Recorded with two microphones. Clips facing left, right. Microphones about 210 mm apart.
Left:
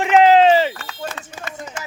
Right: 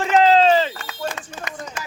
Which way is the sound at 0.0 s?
15° left (ahead or behind).